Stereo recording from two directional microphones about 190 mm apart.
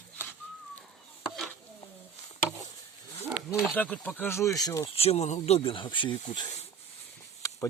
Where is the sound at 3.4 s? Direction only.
5° left (ahead or behind).